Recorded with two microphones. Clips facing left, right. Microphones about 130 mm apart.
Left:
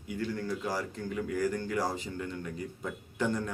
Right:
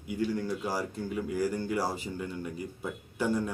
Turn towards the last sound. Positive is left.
turn(degrees=-10)  # may be behind; listen again after turning